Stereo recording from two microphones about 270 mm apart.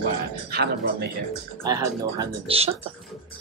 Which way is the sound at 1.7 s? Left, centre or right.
Centre.